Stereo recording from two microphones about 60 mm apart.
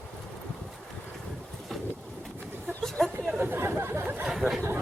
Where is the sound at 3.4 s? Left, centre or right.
Right.